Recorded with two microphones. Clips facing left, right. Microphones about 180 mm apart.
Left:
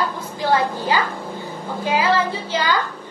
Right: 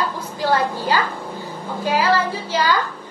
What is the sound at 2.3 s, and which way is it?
Speech, 25° left (ahead or behind).